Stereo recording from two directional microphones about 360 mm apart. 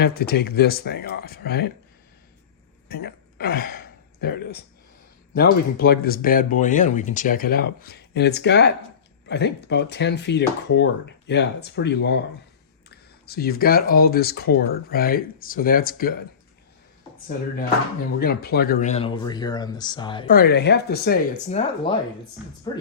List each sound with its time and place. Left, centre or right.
0.0 s speech: left
2.9 s speech: left
18.2 s speech: left
20.3 s speech: left